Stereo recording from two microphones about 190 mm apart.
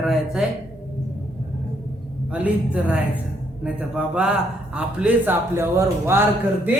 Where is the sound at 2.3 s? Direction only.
5° right (ahead or behind).